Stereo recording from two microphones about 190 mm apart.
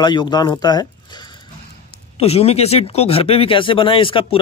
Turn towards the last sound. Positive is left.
turn(degrees=25)  # may be behind; listen again after turning